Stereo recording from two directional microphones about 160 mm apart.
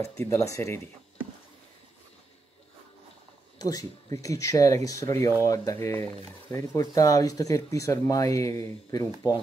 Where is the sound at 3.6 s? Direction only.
20° left (ahead or behind).